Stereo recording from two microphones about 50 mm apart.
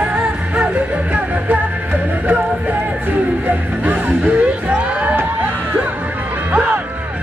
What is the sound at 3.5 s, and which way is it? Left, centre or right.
Music, right.